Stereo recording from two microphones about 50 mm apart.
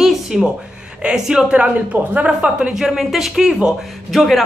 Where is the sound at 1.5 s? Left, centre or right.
Right.